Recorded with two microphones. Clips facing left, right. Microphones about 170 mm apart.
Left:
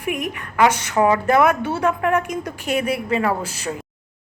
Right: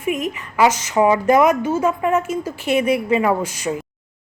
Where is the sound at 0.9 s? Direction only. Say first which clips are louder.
Right 2 dB; 10° right (ahead or behind).